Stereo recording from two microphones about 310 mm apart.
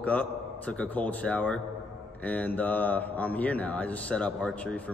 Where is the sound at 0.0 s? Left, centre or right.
Centre.